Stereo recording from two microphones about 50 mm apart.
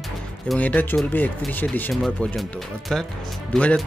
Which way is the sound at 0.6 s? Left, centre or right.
Left.